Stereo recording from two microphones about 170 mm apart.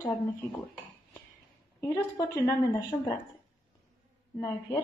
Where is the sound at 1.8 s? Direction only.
15° left (ahead or behind).